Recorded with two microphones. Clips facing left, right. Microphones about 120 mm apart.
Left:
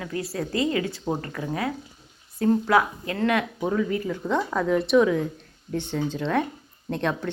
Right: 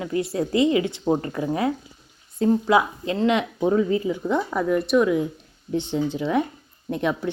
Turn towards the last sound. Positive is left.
turn(degrees=-10)  # may be behind; listen again after turning